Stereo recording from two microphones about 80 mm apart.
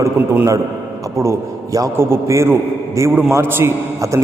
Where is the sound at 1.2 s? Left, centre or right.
Right.